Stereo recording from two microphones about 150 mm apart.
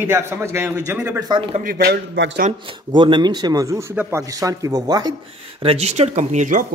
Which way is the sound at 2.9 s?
30° right (ahead or behind).